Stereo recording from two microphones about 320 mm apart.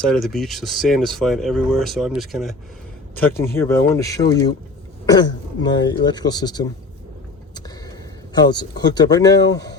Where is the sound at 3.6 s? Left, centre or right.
Centre.